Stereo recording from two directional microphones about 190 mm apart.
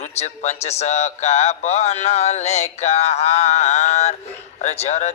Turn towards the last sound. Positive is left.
turn(degrees=35)  # may be behind; listen again after turning